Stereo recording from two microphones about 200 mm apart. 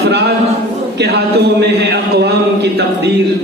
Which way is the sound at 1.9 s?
55° right (ahead or behind).